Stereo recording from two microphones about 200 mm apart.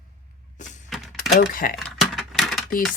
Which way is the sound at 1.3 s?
45° left (ahead or behind).